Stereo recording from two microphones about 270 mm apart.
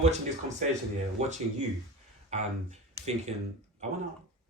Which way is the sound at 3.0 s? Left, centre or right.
Centre.